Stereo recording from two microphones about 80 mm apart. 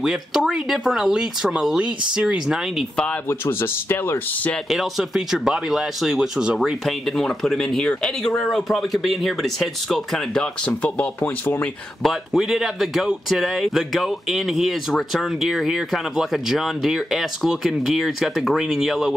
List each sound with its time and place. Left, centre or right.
0.0 s speech: centre
3.3 s speech: left
4.6 s speech: centre; by 11.7 s left
12.0 s speech: centre